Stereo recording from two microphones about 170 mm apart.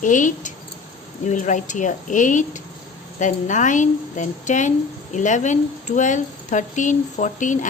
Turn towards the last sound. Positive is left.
turn(degrees=45)  # may be behind; listen again after turning